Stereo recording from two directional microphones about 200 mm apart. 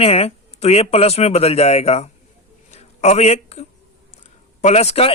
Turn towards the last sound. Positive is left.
turn(degrees=30)  # may be behind; listen again after turning